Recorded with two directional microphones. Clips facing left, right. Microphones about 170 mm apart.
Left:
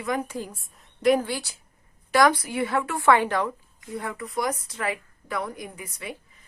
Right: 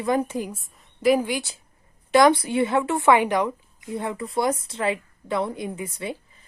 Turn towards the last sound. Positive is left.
turn(degrees=-30)  # may be behind; listen again after turning